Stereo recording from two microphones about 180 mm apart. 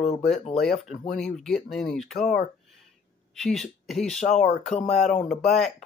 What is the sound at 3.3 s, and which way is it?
Speech, centre (ahead or behind).